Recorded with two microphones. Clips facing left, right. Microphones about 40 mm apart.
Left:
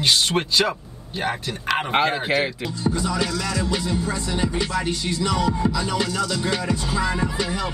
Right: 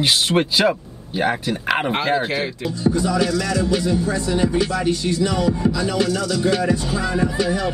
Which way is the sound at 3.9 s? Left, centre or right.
Left.